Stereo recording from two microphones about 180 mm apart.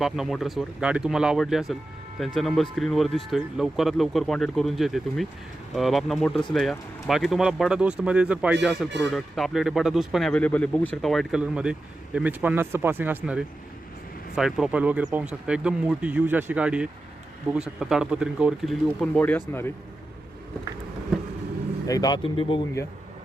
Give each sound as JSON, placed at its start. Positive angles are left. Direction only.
{"t": 0.0, "sound": "speech", "side_deg": 0}
{"t": 21.8, "sound": "speech", "side_deg": 20}